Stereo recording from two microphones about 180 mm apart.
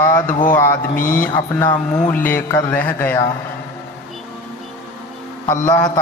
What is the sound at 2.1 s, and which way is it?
Speech, 10° left (ahead or behind).